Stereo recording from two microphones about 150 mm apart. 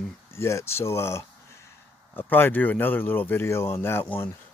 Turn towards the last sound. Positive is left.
turn(degrees=15)  # may be behind; listen again after turning